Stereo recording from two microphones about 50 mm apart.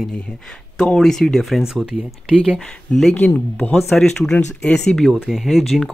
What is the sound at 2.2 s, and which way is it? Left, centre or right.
Speech, centre.